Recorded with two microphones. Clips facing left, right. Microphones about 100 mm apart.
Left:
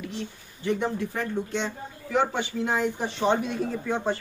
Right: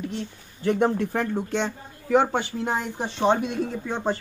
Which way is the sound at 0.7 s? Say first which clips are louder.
Right 5 dB; 50° right (ahead or behind).